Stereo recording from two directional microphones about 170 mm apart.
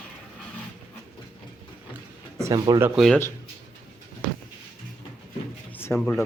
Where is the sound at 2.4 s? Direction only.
20° right (ahead or behind).